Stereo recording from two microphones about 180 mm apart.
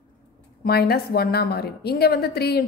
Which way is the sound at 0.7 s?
60° left (ahead or behind).